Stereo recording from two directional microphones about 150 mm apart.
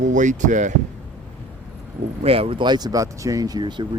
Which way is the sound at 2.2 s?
40° right (ahead or behind).